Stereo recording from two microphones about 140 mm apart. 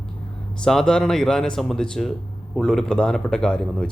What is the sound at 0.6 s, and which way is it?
Speech, 5° left (ahead or behind).